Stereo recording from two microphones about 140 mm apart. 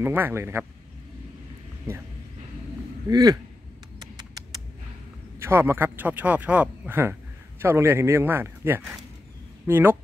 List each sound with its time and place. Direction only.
0.0 s speech: 15° right (ahead or behind)
3.1 s speech: 25° right (ahead or behind)
4.0 s a sound: 30° right (ahead or behind)
5.4 s speech: 20° right (ahead or behind)